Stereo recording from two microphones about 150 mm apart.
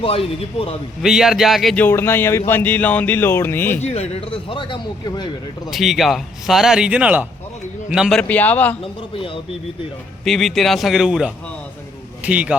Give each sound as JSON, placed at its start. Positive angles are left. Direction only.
{"t": 0.0, "sound": "speech", "side_deg": 40}
{"t": 1.0, "sound": "a man's voice", "side_deg": -5}
{"t": 1.7, "sound": "speech", "side_deg": 15}
{"t": 3.8, "sound": "speech", "side_deg": 45}
{"t": 5.7, "sound": "a man's voice", "side_deg": 0}
{"t": 8.2, "sound": "speech", "side_deg": 10}
{"t": 8.8, "sound": "speech", "side_deg": 35}
{"t": 10.2, "sound": "a man's voice", "side_deg": 0}